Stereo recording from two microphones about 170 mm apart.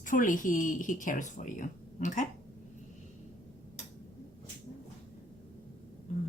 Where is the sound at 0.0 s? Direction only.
50° left (ahead or behind).